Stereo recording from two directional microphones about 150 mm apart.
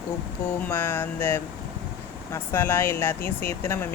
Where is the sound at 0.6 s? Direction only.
15° left (ahead or behind).